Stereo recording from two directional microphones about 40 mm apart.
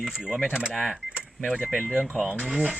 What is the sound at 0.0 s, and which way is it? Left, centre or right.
Speech, centre.